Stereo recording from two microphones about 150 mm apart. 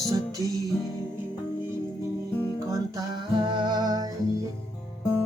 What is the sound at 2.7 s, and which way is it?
Music, 30° right (ahead or behind).